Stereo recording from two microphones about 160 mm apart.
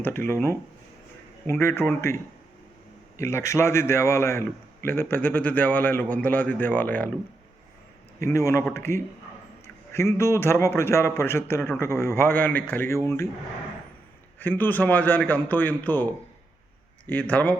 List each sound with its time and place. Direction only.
0.3 s a man's voice: 15° left (ahead or behind)
8.2 s a man's voice: 20° left (ahead or behind)
14.3 s a man's voice: 10° left (ahead or behind)
17.1 s a man's voice: 10° left (ahead or behind)